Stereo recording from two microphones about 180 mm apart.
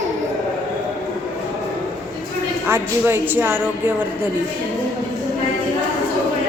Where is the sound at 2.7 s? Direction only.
10° right (ahead or behind).